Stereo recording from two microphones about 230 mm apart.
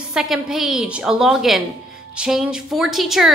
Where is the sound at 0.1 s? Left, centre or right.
Centre.